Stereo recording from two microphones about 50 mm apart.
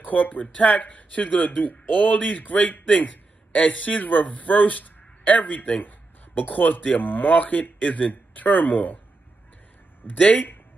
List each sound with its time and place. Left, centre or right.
0.0 s speech: left
10.0 s speech: left